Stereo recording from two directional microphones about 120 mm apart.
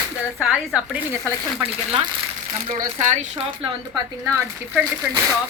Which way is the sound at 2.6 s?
90° right.